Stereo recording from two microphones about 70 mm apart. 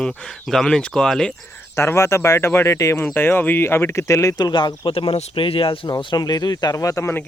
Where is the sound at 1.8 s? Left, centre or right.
Left.